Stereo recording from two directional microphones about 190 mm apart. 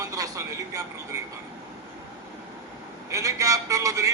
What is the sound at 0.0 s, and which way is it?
Speech, 20° right (ahead or behind).